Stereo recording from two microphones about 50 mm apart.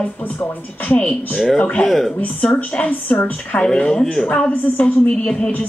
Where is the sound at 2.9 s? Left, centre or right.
Left.